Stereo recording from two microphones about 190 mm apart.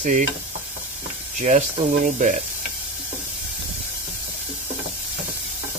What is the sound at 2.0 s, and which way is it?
Speech, 40° right (ahead or behind).